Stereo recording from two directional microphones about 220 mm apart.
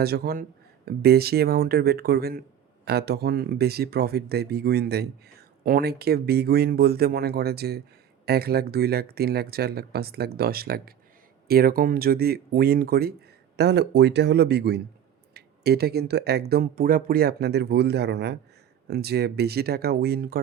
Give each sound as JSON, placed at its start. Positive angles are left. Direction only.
{"t": 0.0, "sound": "speech", "side_deg": -45}